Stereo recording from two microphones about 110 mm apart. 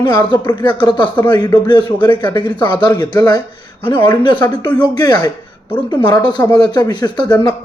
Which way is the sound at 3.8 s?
50° left (ahead or behind).